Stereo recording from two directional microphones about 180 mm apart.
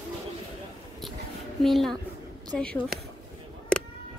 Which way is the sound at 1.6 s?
Centre (ahead or behind).